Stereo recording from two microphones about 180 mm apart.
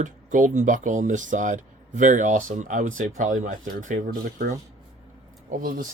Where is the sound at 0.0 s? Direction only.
45° right (ahead or behind).